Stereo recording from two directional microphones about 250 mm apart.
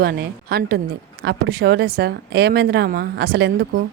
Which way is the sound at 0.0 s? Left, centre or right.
Right.